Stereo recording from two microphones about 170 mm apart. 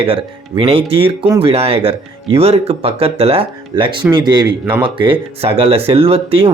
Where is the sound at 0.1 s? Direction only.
30° right (ahead or behind).